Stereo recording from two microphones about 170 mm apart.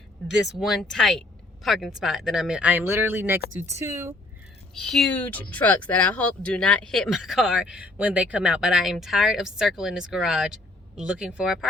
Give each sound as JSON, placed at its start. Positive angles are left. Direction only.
{"t": 0.5, "sound": "speech", "side_deg": 0}
{"t": 4.7, "sound": "speech", "side_deg": 0}